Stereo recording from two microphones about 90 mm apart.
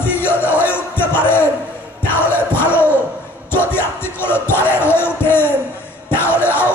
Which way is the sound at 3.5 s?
25° left (ahead or behind).